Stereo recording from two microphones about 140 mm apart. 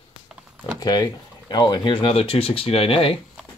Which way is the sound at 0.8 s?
30° left (ahead or behind).